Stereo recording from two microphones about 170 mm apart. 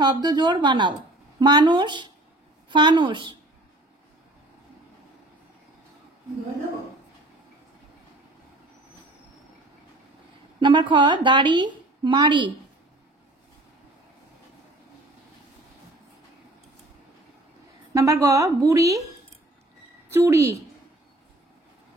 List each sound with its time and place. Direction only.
0.0 s a woman's voice: 25° right (ahead or behind)
10.6 s a woman's voice: 25° right (ahead or behind)
17.9 s a woman's voice: 20° right (ahead or behind)
20.1 s a woman's voice: 15° right (ahead or behind)